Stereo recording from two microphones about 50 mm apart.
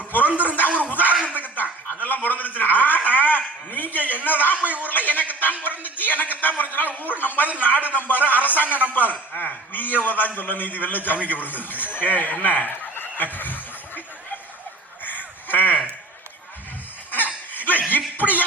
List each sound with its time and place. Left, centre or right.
0.3 s speech: right
0.8 s a sound: left
6.4 s a man's voice: left
15.0 s crow: left
17.5 s chuckle: left